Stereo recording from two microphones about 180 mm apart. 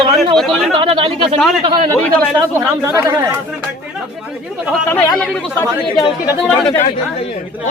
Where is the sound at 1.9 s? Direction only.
5° left (ahead or behind).